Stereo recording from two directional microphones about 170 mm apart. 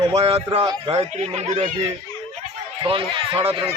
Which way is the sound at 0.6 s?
25° right (ahead or behind).